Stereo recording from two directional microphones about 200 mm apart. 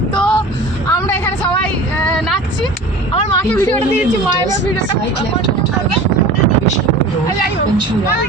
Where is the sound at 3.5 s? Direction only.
10° left (ahead or behind).